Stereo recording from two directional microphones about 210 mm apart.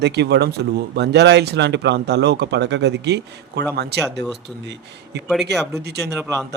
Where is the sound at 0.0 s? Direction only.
50° right (ahead or behind).